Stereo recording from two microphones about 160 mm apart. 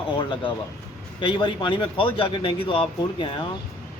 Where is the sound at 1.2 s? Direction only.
30° left (ahead or behind).